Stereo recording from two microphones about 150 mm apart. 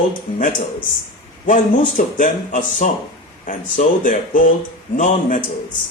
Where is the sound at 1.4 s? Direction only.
60° left (ahead or behind).